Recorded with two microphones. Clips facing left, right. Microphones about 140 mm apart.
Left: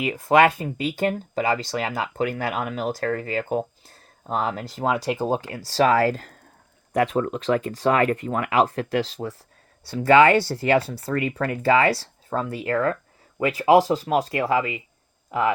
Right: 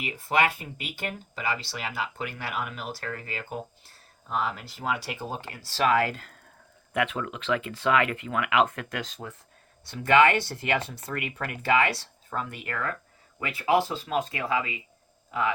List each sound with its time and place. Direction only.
0.1 s speech: 40° left (ahead or behind)